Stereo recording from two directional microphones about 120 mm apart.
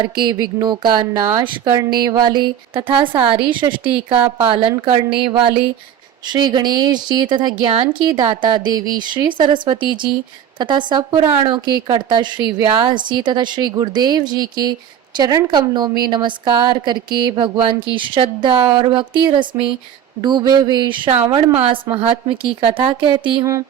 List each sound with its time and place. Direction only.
0.0 s speech: 40° right (ahead or behind)
6.2 s speech: 35° right (ahead or behind)
23.4 s music: 25° right (ahead or behind)